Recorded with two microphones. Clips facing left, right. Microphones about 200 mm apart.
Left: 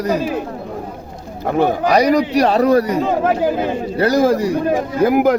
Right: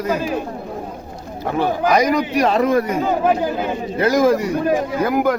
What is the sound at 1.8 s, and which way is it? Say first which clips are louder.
A man's voice: left 1 dB; 35° left (ahead or behind).